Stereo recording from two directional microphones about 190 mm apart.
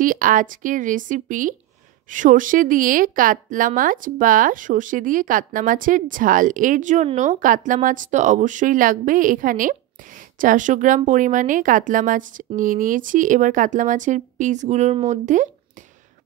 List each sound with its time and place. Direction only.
0.0 s speech: 45° right (ahead or behind)